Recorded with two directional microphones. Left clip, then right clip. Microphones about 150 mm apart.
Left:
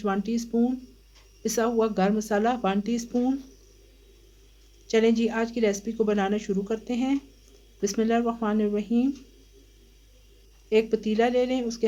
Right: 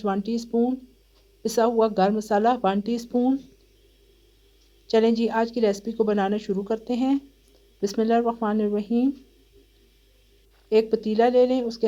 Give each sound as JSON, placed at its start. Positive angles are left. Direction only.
{"t": 0.0, "sound": "speech", "side_deg": -40}
{"t": 4.9, "sound": "speech", "side_deg": -40}
{"t": 10.7, "sound": "speech", "side_deg": -40}